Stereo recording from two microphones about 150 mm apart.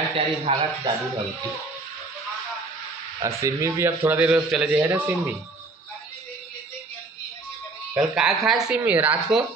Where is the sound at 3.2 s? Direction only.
20° right (ahead or behind).